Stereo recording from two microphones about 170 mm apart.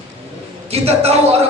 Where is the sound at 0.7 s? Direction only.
35° right (ahead or behind).